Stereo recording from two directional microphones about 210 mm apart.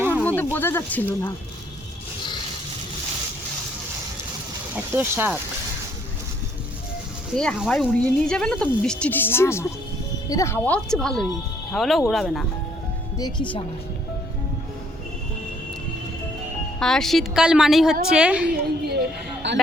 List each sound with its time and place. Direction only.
0.0 s a sound: 10° right (ahead or behind)
0.5 s speech: 10° left (ahead or behind)
4.7 s speech: 10° right (ahead or behind)
7.3 s speech: 5° left (ahead or behind)
13.1 s speech: 20° left (ahead or behind)
16.8 s speech: centre (ahead or behind)
19.4 s speech: 55° right (ahead or behind)